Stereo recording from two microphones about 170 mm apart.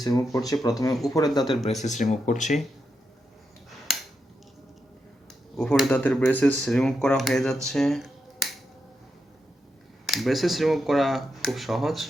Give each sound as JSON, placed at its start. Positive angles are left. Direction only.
{"t": 0.0, "sound": "speech", "side_deg": 20}
{"t": 1.8, "sound": "speech", "side_deg": 45}
{"t": 5.5, "sound": "speech", "side_deg": 0}
{"t": 10.1, "sound": "speech", "side_deg": 0}